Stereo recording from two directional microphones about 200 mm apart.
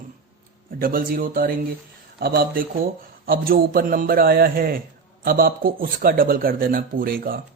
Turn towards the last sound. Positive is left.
turn(degrees=-45)  # may be behind; listen again after turning